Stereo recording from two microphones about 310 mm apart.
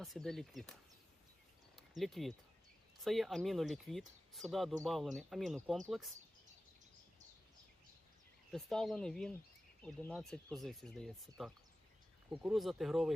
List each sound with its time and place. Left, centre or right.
0.0 s speech: centre
2.0 s speech: centre
8.4 s speech: centre